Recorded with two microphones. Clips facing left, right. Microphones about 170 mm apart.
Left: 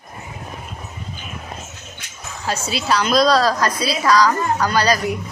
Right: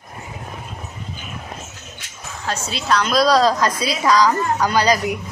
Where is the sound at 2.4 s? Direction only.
5° left (ahead or behind).